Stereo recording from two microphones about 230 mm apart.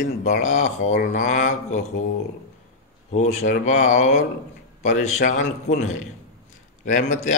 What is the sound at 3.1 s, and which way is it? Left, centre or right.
A man's voice, left.